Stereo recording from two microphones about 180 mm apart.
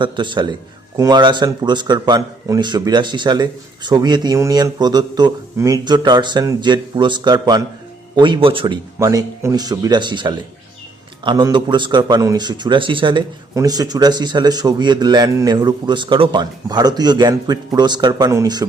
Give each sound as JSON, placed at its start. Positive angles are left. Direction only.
{"t": 0.0, "sound": "a man's voice", "side_deg": -25}